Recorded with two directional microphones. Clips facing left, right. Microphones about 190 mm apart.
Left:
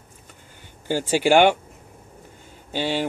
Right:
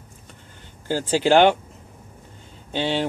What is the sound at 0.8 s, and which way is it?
Speech, 15° left (ahead or behind).